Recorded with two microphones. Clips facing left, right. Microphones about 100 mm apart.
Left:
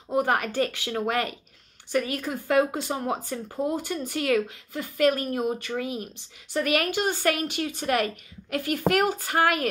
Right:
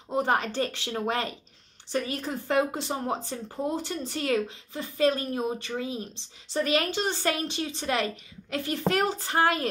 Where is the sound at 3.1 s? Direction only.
25° right (ahead or behind).